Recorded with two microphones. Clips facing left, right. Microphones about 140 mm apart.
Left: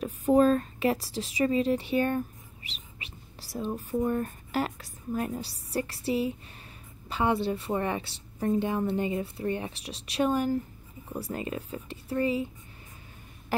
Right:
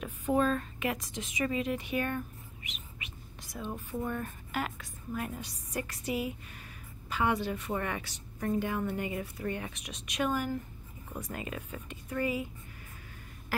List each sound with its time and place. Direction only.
0.0 s a woman's voice: 35° left (ahead or behind)